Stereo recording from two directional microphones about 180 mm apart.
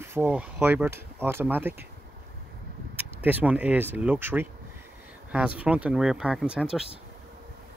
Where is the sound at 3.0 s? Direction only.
10° right (ahead or behind).